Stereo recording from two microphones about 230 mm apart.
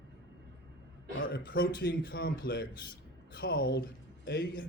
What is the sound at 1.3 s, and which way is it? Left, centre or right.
Speech, left.